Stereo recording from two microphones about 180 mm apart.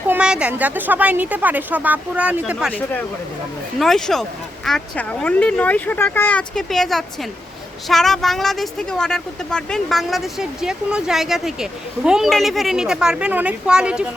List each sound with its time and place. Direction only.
0.1 s a woman's voice: 5° right (ahead or behind)
3.8 s speech: centre (ahead or behind)